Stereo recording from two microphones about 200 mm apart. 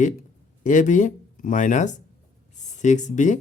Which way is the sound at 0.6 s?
40° left (ahead or behind).